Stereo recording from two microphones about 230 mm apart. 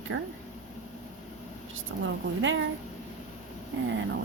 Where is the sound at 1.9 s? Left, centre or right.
Right.